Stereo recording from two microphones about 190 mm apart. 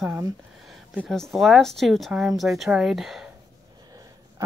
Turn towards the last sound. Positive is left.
turn(degrees=0)  # may be behind; listen again after turning